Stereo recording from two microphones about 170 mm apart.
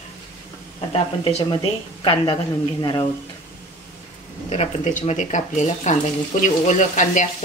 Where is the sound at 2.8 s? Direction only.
25° left (ahead or behind).